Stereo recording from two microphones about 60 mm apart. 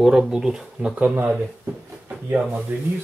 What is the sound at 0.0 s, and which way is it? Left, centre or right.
Speech, centre.